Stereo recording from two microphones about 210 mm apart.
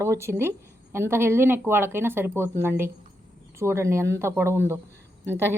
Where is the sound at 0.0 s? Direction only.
10° right (ahead or behind).